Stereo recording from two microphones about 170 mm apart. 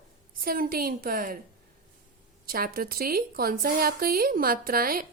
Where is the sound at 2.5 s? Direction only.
60° right (ahead or behind).